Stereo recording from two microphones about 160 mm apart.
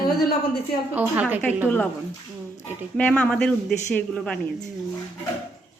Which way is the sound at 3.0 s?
10° left (ahead or behind).